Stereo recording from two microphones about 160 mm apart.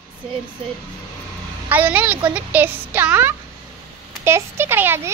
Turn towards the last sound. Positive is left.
turn(degrees=-15)  # may be behind; listen again after turning